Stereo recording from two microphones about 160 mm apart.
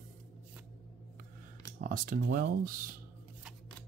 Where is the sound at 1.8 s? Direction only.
60° right (ahead or behind).